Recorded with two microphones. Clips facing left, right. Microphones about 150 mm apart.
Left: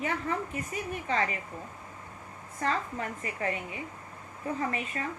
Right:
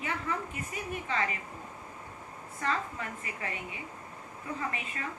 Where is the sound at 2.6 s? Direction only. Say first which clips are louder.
Left 2 dB; 35° left (ahead or behind).